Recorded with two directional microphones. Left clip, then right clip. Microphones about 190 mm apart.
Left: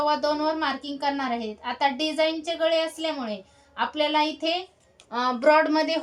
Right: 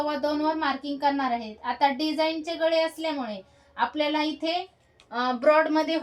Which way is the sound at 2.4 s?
30° left (ahead or behind).